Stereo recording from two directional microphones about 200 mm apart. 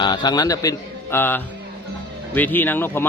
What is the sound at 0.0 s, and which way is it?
A man's voice, 20° left (ahead or behind).